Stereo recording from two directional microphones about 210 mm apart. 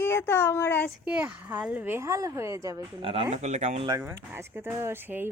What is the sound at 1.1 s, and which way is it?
Speech, 5° right (ahead or behind).